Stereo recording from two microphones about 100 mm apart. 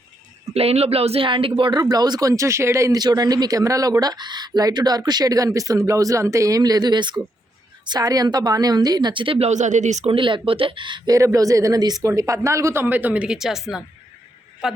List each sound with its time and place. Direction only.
0.5 s speech: 90° right; by 1.7 s 65° right (ahead or behind)
1.7 s speech: 40° right (ahead or behind)
3.0 s a woman's voice: 40° right (ahead or behind)
11.1 s a man's voice: 35° right (ahead or behind); by 14.8 s 5° right (ahead or behind)